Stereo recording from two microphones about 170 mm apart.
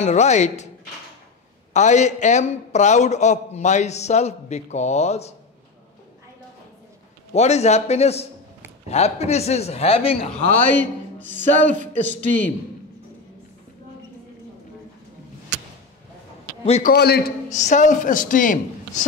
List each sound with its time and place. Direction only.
0.0 s a man's voice: 45° left (ahead or behind)
1.7 s a man's voice: 45° left (ahead or behind)
7.3 s speech: 40° left (ahead or behind)
10.8 s a man's voice: 10° left (ahead or behind)
16.6 s speech: 40° left (ahead or behind)
16.9 s a man's voice: 70° left (ahead or behind)
17.5 s a man's voice: 45° left (ahead or behind)